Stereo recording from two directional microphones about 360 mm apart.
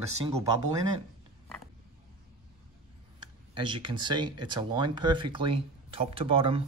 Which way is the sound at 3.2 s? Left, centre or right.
Centre.